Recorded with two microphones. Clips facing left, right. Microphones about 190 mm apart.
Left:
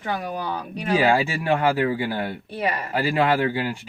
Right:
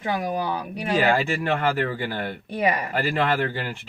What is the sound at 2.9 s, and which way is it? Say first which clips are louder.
Speech: left 2 dB; 10° left (ahead or behind).